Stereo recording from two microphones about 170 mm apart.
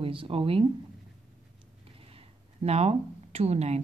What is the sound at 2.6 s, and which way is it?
Speech, 40° right (ahead or behind).